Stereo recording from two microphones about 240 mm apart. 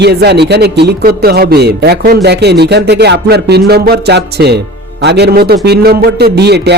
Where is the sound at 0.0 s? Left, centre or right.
Right.